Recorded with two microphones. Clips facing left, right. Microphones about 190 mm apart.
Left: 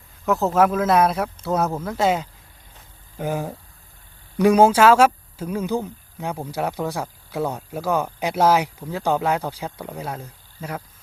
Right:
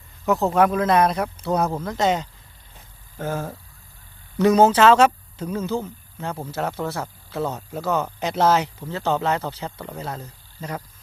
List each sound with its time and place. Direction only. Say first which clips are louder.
0.3 s speech: even; centre (ahead or behind)